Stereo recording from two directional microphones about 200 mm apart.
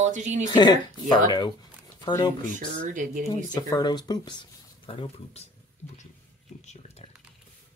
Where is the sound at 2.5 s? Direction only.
40° right (ahead or behind).